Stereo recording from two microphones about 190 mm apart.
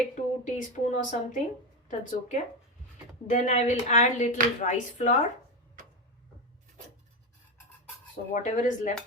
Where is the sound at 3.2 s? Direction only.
40° left (ahead or behind).